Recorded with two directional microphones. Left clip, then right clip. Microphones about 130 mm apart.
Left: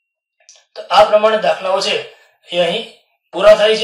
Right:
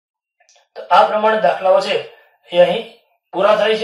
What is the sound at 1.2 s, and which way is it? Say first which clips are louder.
Speech: left 1 dB; 30° left (ahead or behind).